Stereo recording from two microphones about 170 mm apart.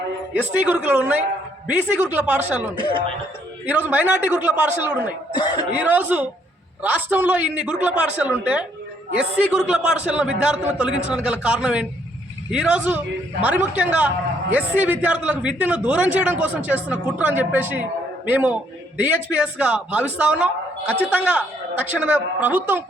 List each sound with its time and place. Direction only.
0.5 s a man's voice: 10° right (ahead or behind)
3.7 s a man's voice: 10° right (ahead or behind)
5.3 s speech: 25° left (ahead or behind)
5.7 s a man's voice: 10° right (ahead or behind)